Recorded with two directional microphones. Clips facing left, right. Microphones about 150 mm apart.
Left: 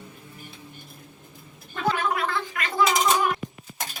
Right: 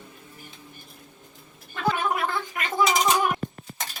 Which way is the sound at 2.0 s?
20° right (ahead or behind).